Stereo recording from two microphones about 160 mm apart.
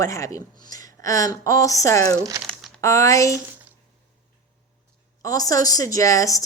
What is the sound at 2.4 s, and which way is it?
Crumpling, 5° left (ahead or behind).